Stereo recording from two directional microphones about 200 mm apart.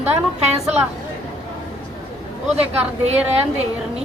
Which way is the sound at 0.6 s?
5° right (ahead or behind).